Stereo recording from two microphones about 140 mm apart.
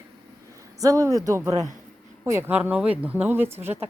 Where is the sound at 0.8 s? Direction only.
25° right (ahead or behind).